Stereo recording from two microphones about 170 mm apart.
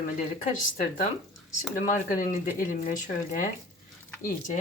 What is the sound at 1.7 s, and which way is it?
Speech, 50° left (ahead or behind).